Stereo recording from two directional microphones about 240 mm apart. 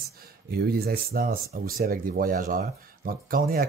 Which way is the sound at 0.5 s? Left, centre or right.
Right.